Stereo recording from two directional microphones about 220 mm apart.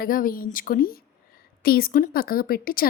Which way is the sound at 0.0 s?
40° left (ahead or behind).